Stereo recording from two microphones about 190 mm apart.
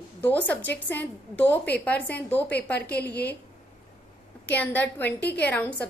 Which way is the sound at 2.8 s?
60° left (ahead or behind).